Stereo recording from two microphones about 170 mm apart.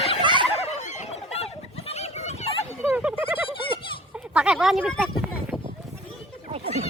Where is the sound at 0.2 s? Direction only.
30° right (ahead or behind).